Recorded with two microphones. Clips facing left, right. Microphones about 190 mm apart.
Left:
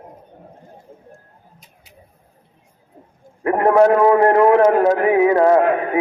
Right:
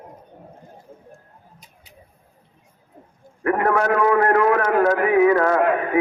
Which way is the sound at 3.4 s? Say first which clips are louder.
Left 6 dB; 25° left (ahead or behind).